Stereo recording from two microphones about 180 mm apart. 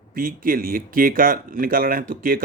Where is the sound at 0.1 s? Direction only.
50° right (ahead or behind).